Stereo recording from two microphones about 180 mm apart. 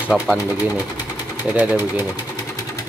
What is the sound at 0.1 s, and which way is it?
Speech, centre (ahead or behind).